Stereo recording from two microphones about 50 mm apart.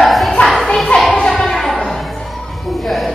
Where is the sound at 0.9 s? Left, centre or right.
Left.